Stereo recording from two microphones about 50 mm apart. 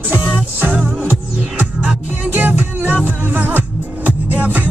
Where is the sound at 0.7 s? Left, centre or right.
Right.